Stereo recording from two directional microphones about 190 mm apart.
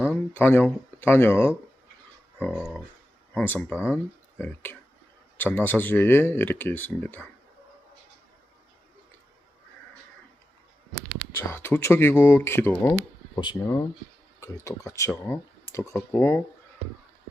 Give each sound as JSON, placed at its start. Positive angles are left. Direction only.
{"t": 0.3, "sound": "speech", "side_deg": 10}
{"t": 2.4, "sound": "speech", "side_deg": 0}
{"t": 3.3, "sound": "speech", "side_deg": 10}
{"t": 11.3, "sound": "speech", "side_deg": 10}